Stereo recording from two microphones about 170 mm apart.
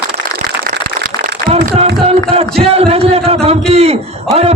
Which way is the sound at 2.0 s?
35° right (ahead or behind).